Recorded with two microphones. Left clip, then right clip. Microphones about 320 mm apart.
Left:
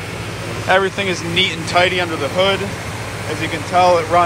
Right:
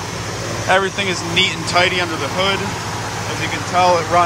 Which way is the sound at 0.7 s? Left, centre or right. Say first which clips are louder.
Left 1 dB; centre.